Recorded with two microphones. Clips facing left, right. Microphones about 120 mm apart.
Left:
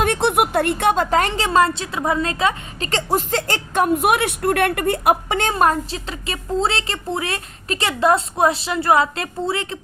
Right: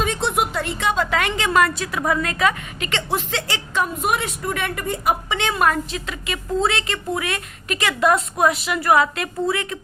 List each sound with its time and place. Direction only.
0.0 s a woman's voice: 60° left (ahead or behind); by 9.7 s 30° left (ahead or behind)